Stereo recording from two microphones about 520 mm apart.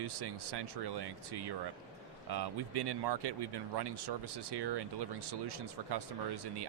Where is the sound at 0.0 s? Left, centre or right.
Right.